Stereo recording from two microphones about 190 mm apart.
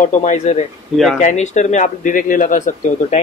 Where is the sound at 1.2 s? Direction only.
40° left (ahead or behind).